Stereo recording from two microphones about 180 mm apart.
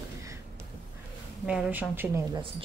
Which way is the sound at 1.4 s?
5° right (ahead or behind).